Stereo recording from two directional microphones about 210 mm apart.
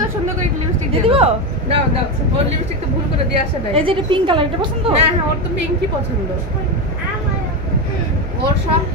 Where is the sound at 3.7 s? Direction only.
25° right (ahead or behind).